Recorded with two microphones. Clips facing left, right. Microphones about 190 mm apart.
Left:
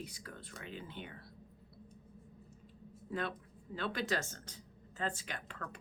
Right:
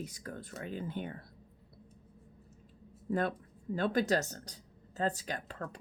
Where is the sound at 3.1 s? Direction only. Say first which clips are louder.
Right 7 dB; 45° right (ahead or behind).